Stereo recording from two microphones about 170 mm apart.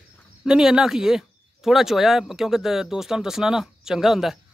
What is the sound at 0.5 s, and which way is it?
Speech, 5° right (ahead or behind).